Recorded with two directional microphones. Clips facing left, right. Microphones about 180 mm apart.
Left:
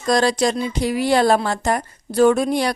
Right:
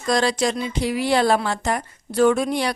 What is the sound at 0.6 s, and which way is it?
A woman's voice, 45° left (ahead or behind).